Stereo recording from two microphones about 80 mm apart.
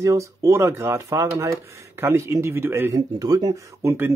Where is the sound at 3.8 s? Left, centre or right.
Right.